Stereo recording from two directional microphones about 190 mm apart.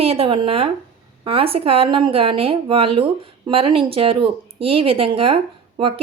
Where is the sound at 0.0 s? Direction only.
30° right (ahead or behind).